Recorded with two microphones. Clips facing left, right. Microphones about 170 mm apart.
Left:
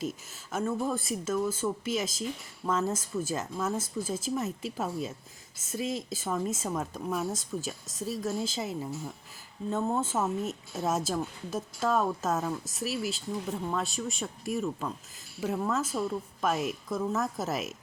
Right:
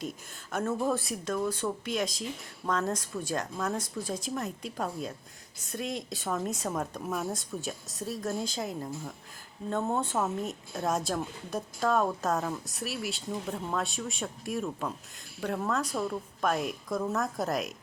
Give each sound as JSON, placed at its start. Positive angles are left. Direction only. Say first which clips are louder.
{"t": 0.5, "sound": "a woman's voice", "louder": "right 1 dB", "side_deg": 0}